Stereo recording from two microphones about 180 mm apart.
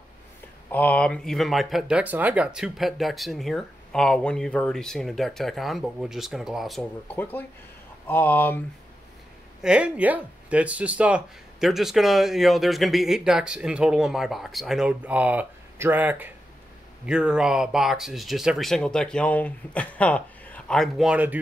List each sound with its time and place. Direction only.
0.7 s speech: 10° left (ahead or behind)
9.6 s speech: 5° right (ahead or behind)